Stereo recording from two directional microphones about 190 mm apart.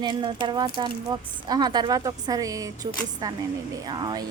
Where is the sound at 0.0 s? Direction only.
25° right (ahead or behind).